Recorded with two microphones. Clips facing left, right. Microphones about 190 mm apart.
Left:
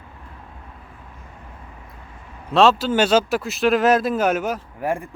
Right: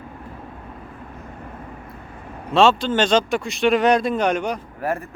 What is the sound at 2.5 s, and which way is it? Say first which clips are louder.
Speech: even; centre (ahead or behind).